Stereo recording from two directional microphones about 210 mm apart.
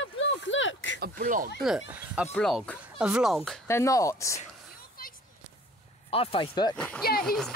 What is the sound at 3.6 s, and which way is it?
Speech, 15° left (ahead or behind).